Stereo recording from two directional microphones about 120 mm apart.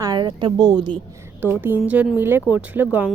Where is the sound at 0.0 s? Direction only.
35° right (ahead or behind).